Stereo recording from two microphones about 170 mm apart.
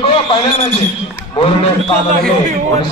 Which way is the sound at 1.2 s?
35° left (ahead or behind).